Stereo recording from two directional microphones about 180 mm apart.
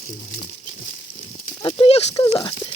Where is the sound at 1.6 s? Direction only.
30° left (ahead or behind).